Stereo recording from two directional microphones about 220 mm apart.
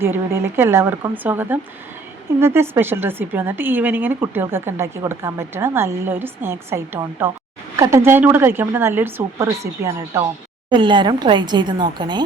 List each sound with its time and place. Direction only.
0.0 s a woman's voice: 10° right (ahead or behind)